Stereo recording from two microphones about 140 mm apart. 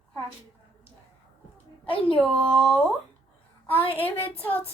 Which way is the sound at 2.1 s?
5° left (ahead or behind).